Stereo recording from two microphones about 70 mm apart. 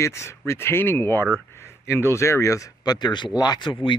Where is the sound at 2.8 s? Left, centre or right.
Left.